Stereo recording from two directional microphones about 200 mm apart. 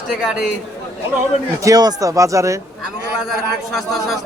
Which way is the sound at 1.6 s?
20° right (ahead or behind).